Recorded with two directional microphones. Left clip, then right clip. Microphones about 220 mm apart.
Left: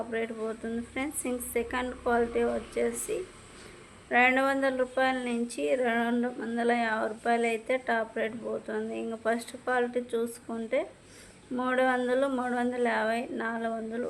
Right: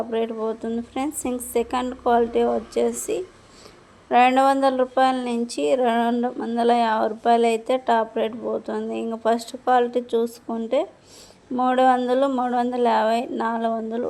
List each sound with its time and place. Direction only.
0.1 s speech: 20° right (ahead or behind)